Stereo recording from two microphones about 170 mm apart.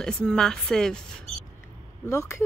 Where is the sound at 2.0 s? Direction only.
15° left (ahead or behind).